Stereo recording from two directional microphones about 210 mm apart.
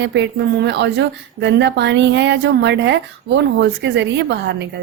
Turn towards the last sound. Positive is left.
turn(degrees=-55)  # may be behind; listen again after turning